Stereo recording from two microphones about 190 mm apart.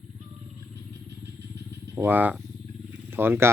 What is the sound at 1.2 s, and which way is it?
Vehicle, 60° right (ahead or behind).